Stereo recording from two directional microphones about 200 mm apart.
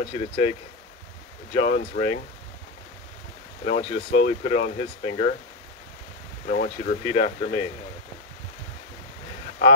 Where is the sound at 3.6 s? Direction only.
35° left (ahead or behind).